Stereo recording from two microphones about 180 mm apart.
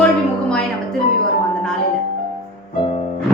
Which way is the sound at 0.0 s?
5° left (ahead or behind).